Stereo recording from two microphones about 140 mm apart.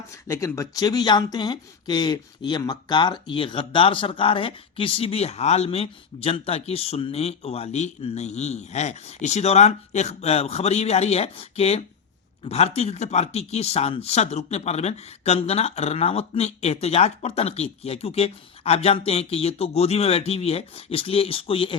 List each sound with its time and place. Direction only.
0.3 s speech: 20° left (ahead or behind); by 21.8 s 40° left (ahead or behind)